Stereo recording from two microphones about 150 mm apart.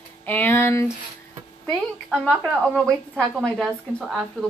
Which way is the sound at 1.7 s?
5° left (ahead or behind).